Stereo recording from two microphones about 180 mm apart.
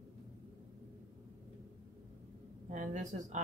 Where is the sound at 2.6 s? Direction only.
45° right (ahead or behind).